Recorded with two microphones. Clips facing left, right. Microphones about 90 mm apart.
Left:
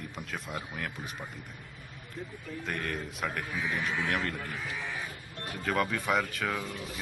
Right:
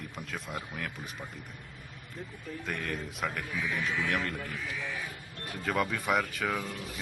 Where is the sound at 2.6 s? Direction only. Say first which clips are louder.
Left 1 dB; centre (ahead or behind).